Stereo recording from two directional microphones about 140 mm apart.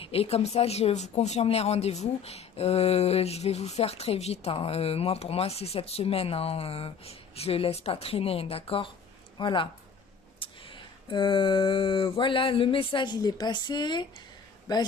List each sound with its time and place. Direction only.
0.0 s a man's voice: 45° left (ahead or behind); by 14.8 s 30° left (ahead or behind)